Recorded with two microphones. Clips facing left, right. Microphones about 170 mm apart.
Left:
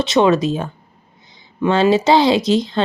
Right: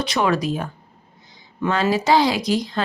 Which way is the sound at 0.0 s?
25° left (ahead or behind).